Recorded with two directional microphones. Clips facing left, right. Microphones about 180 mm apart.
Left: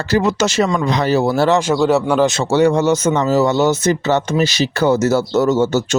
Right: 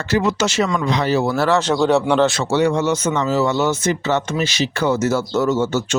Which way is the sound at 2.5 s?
40° left (ahead or behind).